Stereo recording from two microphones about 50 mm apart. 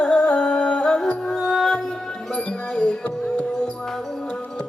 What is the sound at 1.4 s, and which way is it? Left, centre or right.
Music, centre.